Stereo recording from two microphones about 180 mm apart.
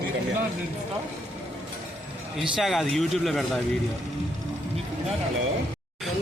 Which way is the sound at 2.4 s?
Centre (ahead or behind).